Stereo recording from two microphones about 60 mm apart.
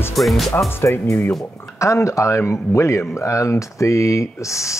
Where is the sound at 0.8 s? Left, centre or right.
Left.